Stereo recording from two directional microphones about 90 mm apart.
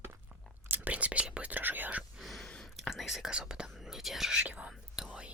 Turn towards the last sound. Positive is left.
turn(degrees=-15)  # may be behind; listen again after turning